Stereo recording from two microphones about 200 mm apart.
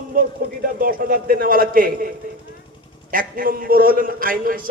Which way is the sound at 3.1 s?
45° right (ahead or behind).